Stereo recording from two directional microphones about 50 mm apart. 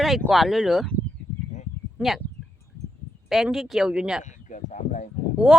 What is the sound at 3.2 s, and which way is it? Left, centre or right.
Speech, centre.